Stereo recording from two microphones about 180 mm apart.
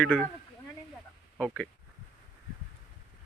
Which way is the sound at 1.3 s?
5° left (ahead or behind).